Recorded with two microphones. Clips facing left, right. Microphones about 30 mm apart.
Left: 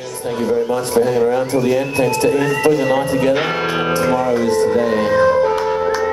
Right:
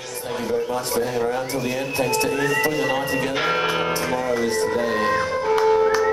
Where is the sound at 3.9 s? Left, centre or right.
Left.